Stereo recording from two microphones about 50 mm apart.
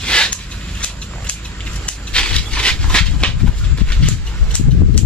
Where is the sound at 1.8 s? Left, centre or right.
Left.